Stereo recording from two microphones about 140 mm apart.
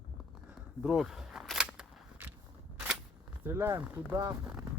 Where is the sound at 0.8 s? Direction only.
5° right (ahead or behind).